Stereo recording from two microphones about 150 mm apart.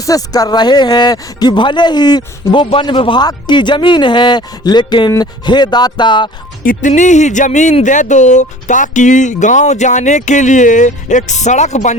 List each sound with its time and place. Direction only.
0.0 s speech: 25° left (ahead or behind)
6.6 s speech: 60° left (ahead or behind)